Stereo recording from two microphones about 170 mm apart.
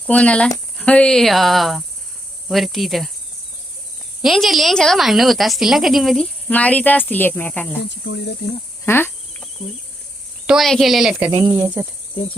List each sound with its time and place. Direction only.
0.1 s a woman's voice: 5° left (ahead or behind)
4.2 s a woman's voice: centre (ahead or behind)
7.9 s speech: 90° left
8.9 s cricket: 15° left (ahead or behind)
10.4 s a woman's voice: centre (ahead or behind)
11.5 s cricket: 10° right (ahead or behind)